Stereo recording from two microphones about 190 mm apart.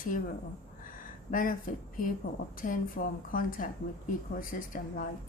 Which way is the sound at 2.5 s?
45° left (ahead or behind).